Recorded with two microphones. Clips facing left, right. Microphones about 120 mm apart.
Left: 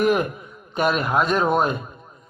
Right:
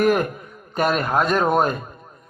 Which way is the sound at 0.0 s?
45° right (ahead or behind).